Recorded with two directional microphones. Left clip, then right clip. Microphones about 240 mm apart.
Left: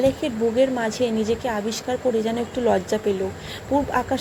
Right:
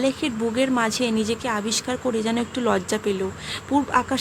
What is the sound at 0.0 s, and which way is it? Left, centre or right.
Speech, centre.